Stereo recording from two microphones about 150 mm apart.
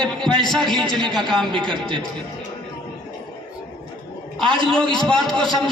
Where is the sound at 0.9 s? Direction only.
30° right (ahead or behind).